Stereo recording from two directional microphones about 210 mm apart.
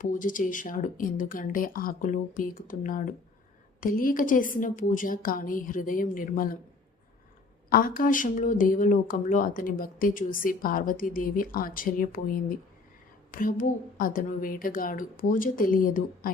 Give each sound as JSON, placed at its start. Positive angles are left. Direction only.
{"t": 0.0, "sound": "speech", "side_deg": 40}
{"t": 7.7, "sound": "speech", "side_deg": 45}